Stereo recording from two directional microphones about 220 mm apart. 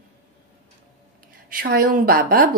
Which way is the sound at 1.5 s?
40° right (ahead or behind).